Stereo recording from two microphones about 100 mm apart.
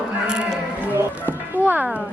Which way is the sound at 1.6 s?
15° right (ahead or behind).